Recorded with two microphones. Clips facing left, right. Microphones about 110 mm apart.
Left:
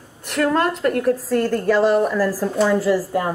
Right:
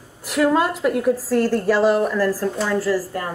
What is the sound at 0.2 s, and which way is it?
Speech, 5° right (ahead or behind).